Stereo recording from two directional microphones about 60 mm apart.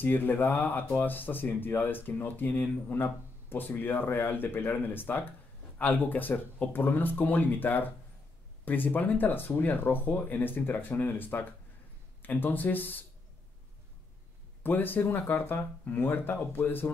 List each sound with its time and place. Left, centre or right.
0.0 s speech: left
14.6 s speech: left